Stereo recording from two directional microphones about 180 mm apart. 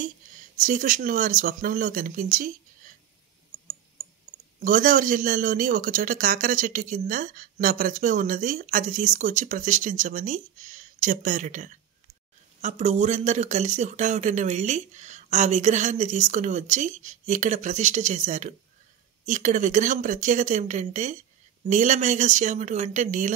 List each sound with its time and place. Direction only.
0.0 s speech: 50° right (ahead or behind)
4.6 s a man's voice: 50° right (ahead or behind)